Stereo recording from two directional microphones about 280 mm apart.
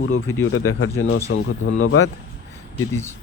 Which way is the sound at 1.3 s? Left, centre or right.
Left.